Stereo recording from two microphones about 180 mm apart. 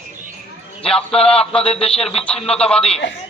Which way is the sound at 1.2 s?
30° left (ahead or behind).